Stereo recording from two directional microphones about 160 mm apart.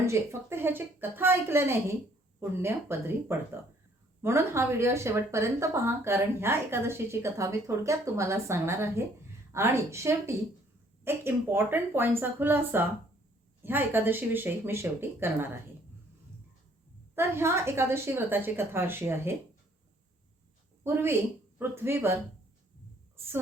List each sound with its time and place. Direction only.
0.0 s speech: 15° right (ahead or behind)
17.2 s speech: 15° right (ahead or behind)
20.8 s speech: 15° right (ahead or behind)